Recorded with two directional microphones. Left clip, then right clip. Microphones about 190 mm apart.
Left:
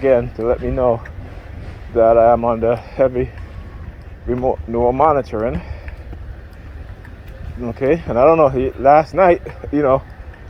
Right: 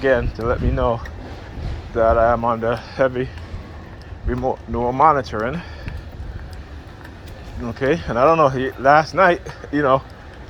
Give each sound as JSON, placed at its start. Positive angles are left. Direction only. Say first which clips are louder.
{"t": 0.0, "sound": "speech", "louder": "left 3 dB", "side_deg": 45}
{"t": 4.3, "sound": "speech", "louder": "left 4 dB", "side_deg": 50}
{"t": 7.6, "sound": "speech", "louder": "left 3 dB", "side_deg": 50}